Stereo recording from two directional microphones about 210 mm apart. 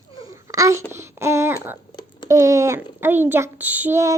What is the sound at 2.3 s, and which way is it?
A woman's voice, 15° right (ahead or behind).